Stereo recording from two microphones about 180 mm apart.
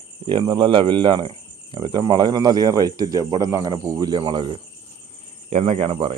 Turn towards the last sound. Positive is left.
turn(degrees=-30)  # may be behind; listen again after turning